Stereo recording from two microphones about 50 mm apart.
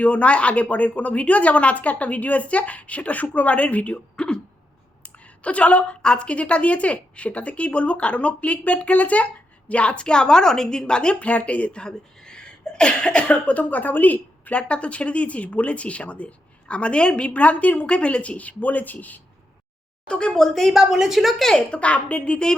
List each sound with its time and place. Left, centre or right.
0.0 s a woman's voice: left
14.5 s a woman's voice: left
20.1 s a woman's voice: centre
20.7 s a woman's voice: centre
21.3 s a woman's voice: centre
21.7 s a woman's voice: left